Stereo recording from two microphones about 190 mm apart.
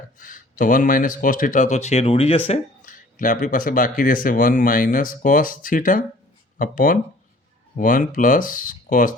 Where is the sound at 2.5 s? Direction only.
45° left (ahead or behind).